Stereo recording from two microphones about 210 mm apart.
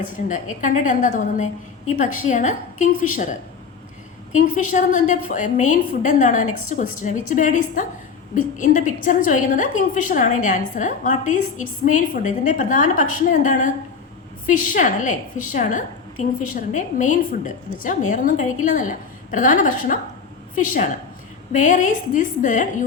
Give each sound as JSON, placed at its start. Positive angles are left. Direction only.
{"t": 0.0, "sound": "a woman's voice", "side_deg": 35}
{"t": 4.4, "sound": "a woman's voice", "side_deg": 40}